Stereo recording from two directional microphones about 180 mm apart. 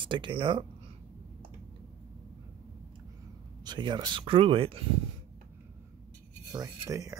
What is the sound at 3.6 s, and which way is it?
Speech, 25° right (ahead or behind).